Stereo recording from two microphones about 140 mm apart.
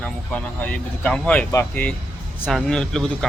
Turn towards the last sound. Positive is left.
turn(degrees=5)  # may be behind; listen again after turning